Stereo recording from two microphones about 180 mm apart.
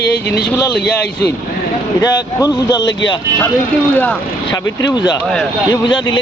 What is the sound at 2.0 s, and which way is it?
Speech, 20° left (ahead or behind).